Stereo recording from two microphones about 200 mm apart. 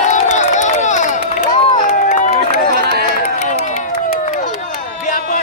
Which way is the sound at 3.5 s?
40° left (ahead or behind).